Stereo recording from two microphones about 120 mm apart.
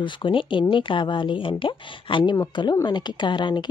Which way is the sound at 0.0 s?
45° left (ahead or behind).